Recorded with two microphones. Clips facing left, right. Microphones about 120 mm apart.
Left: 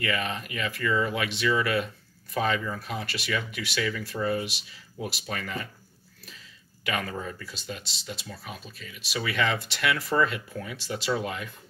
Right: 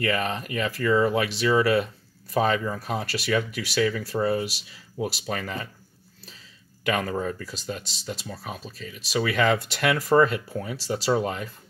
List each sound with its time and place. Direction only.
0.0 s speech: 40° right (ahead or behind)
6.8 s speech: 40° right (ahead or behind)